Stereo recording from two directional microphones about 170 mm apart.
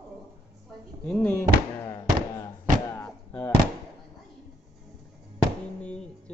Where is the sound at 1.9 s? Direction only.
20° left (ahead or behind).